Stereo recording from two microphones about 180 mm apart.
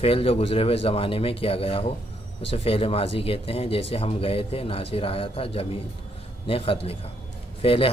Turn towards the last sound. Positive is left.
turn(degrees=30)  # may be behind; listen again after turning